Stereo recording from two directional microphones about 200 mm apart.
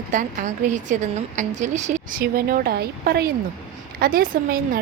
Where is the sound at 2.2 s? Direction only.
50° right (ahead or behind).